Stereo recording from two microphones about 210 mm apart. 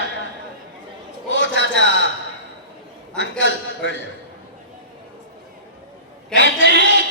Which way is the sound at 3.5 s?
60° left (ahead or behind).